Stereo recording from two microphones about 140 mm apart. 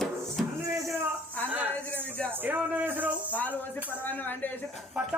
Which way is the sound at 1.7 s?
10° left (ahead or behind).